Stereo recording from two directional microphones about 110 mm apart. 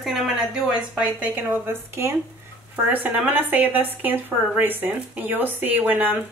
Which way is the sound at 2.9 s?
15° right (ahead or behind).